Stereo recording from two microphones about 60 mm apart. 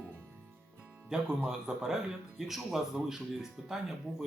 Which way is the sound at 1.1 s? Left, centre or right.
Centre.